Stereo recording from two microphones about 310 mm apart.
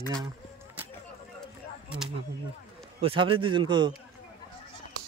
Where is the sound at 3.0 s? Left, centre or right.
Centre.